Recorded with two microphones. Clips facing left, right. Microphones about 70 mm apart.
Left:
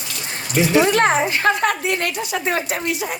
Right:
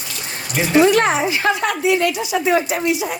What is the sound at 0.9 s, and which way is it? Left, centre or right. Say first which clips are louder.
Speech: right 1 dB; left.